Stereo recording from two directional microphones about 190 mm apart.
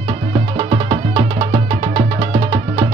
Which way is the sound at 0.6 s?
30° right (ahead or behind).